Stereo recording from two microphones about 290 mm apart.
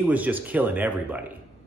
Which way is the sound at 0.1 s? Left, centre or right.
Centre.